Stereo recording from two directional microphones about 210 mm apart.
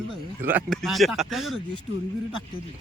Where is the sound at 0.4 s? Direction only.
10° right (ahead or behind).